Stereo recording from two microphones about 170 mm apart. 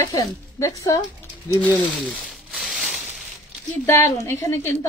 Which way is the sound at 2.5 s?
Centre (ahead or behind).